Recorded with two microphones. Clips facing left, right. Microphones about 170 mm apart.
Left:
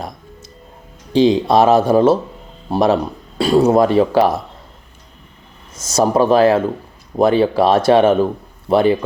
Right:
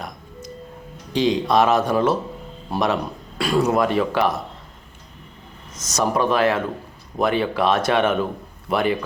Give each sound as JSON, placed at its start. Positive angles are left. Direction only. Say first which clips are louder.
{"t": 1.1, "sound": "speech", "louder": "left 6 dB", "side_deg": 30}
{"t": 5.7, "sound": "speech", "louder": "left 7 dB", "side_deg": 30}